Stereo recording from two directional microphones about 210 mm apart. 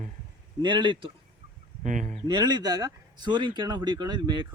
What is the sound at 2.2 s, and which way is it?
Speech, 20° right (ahead or behind).